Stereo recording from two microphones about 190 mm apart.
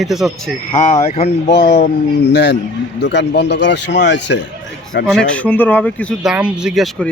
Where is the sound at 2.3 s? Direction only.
65° left (ahead or behind).